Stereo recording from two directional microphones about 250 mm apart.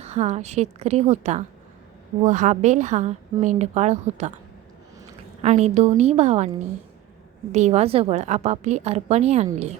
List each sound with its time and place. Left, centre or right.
0.0 s a woman's voice: right
5.4 s a woman's voice: right
7.5 s a woman's voice: right